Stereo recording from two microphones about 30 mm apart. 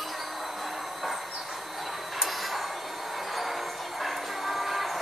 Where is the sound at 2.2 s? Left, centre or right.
Centre.